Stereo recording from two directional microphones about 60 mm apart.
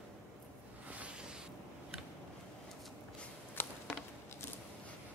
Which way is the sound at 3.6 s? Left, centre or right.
Left.